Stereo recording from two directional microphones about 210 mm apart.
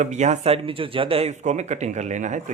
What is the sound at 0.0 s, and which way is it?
Speech, 35° right (ahead or behind).